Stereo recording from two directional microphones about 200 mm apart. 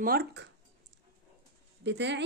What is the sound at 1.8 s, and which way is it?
Speech, 60° right (ahead or behind).